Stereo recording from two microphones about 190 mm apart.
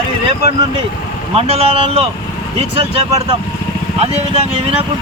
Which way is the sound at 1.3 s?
30° right (ahead or behind).